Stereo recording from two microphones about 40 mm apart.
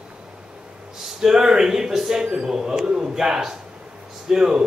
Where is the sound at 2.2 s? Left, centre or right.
Right.